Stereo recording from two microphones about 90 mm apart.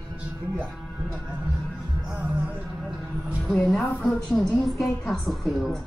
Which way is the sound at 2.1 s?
15° right (ahead or behind).